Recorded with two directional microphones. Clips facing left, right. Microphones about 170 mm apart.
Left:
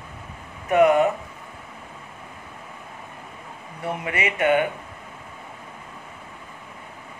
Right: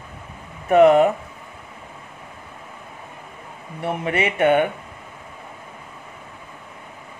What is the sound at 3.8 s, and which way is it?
Speech, 25° right (ahead or behind).